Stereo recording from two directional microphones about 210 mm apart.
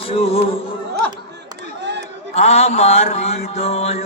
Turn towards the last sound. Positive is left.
turn(degrees=30)  # may be behind; listen again after turning